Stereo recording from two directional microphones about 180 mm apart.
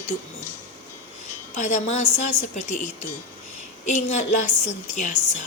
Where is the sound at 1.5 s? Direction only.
40° left (ahead or behind).